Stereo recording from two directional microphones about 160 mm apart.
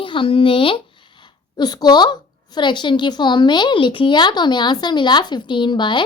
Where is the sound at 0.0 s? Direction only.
30° left (ahead or behind).